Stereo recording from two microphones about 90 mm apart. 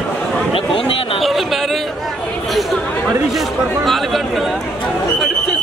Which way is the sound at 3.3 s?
Centre (ahead or behind).